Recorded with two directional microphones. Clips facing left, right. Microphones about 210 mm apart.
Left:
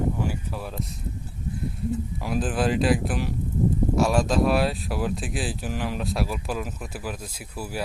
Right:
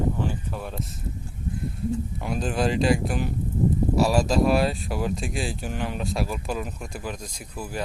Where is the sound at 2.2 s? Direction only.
Centre (ahead or behind).